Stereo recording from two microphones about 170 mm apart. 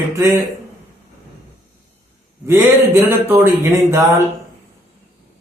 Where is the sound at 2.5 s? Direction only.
15° right (ahead or behind).